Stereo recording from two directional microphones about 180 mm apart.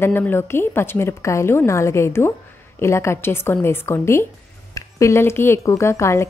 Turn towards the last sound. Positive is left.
turn(degrees=15)  # may be behind; listen again after turning